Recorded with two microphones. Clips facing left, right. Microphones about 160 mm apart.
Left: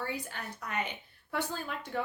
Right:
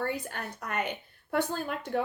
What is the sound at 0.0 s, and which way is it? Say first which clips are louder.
Speech: right 5 dB; 55° right (ahead or behind).